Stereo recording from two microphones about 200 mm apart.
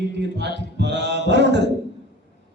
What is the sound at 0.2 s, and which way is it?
Speech, 60° right (ahead or behind).